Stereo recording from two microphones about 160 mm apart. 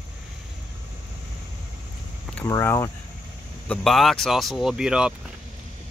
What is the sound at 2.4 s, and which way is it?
Speech, 20° left (ahead or behind).